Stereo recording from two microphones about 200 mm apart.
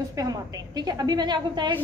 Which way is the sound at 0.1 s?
20° right (ahead or behind).